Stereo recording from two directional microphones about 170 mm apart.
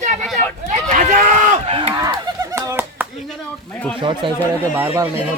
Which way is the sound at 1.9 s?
25° right (ahead or behind).